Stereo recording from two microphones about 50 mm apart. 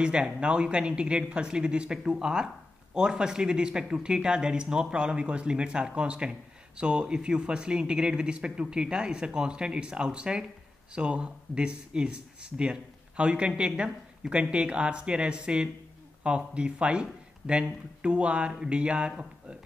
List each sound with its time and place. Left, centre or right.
0.0 s speech: centre